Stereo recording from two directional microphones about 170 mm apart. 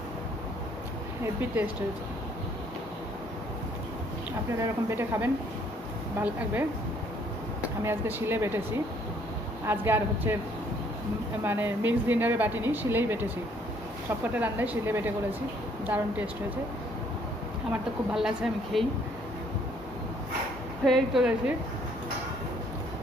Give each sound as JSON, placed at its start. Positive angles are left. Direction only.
{"t": 1.2, "sound": "speech", "side_deg": -10}
{"t": 4.5, "sound": "speech", "side_deg": -15}
{"t": 7.9, "sound": "speech", "side_deg": -15}
{"t": 11.4, "sound": "speech", "side_deg": -10}
{"t": 14.3, "sound": "speech", "side_deg": -10}
{"t": 17.7, "sound": "speech", "side_deg": -5}
{"t": 20.8, "sound": "speech", "side_deg": 0}